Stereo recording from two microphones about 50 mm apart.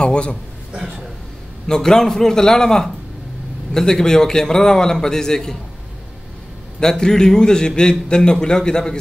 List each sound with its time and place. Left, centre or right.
0.0 s a man's voice: centre
1.7 s a man's voice: centre
6.8 s a man's voice: centre